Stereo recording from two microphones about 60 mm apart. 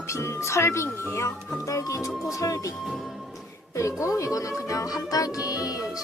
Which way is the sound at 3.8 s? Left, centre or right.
Left.